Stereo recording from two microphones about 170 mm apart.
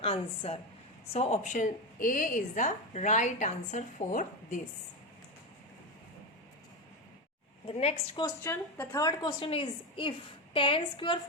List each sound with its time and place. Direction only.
0.0 s a woman's voice: 35° left (ahead or behind)
7.7 s a woman's voice: 35° left (ahead or behind)
8.2 s a woman's voice: 15° left (ahead or behind)